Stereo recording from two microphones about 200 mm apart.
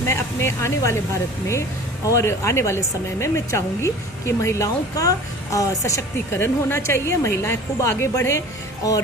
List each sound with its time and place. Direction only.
0.1 s a woman's voice: 10° left (ahead or behind)